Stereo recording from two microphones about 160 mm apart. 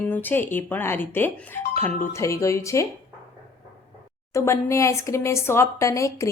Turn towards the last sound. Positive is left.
turn(degrees=20)  # may be behind; listen again after turning